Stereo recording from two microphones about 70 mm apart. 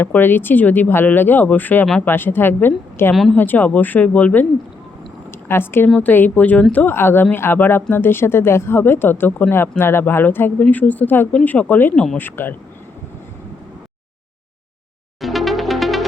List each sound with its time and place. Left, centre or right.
0.0 s speech: left
5.5 s speech: left
6.8 s speech: left
11.3 s speech: centre
15.2 s music: centre